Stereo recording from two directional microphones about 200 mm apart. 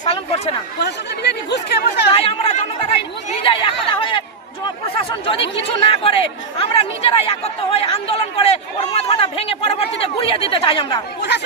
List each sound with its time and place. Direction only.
0.0 s a sound: 30° left (ahead or behind)
0.8 s chatter: 55° left (ahead or behind)
2.1 s chatter: 30° left (ahead or behind)
4.9 s speech: 25° left (ahead or behind)